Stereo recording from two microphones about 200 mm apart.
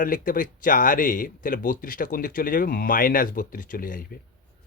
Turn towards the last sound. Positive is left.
turn(degrees=45)  # may be behind; listen again after turning